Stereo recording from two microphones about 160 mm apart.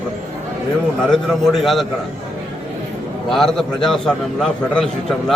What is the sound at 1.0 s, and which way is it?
Speech, 5° left (ahead or behind).